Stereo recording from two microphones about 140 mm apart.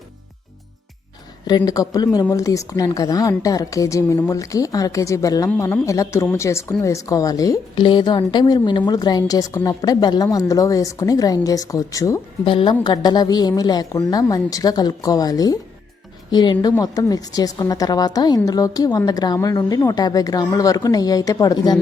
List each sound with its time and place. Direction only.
1.5 s a woman's voice: 30° left (ahead or behind)
12.5 s a woman's voice: 35° left (ahead or behind)